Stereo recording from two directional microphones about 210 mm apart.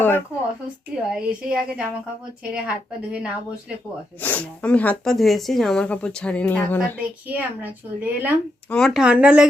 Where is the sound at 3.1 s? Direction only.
5° right (ahead or behind).